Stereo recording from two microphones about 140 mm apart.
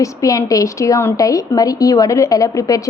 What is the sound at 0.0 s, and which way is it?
A woman's voice, 25° left (ahead or behind).